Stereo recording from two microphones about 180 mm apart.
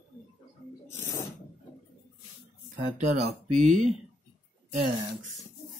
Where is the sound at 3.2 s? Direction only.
40° right (ahead or behind).